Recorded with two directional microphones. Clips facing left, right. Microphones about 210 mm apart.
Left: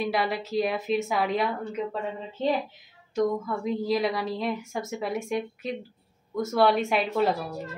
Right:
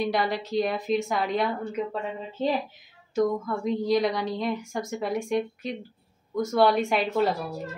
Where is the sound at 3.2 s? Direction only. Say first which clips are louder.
Right 1 dB; 5° left (ahead or behind).